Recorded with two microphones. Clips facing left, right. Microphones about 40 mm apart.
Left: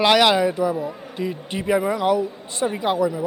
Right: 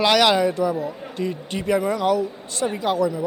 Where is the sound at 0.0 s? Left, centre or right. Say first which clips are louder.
Left 1 dB; centre.